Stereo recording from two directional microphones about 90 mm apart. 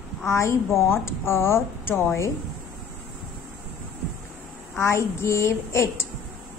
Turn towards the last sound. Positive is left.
turn(degrees=30)  # may be behind; listen again after turning